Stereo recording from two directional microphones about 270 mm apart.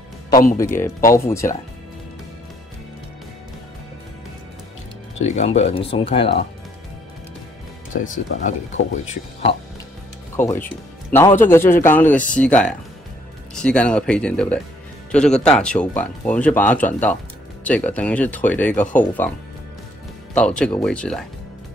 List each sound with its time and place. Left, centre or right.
0.3 s speech: left
0.6 s speech: centre
5.2 s speech: left
7.9 s speech: left
8.9 s speech: left
10.3 s speech: centre
20.3 s speech: centre